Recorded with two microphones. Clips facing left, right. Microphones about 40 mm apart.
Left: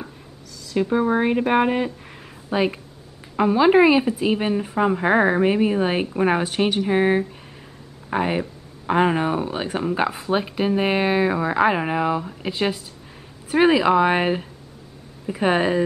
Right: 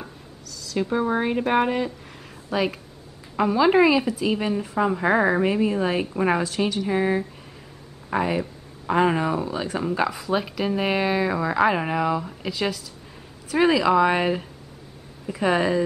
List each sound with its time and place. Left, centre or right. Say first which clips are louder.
0.7 s speech: left 3 dB; centre
7.0 s speech: left 4 dB; left
15.4 s speech: left 2 dB; left